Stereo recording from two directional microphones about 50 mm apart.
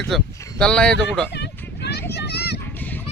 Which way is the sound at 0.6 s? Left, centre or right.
Centre.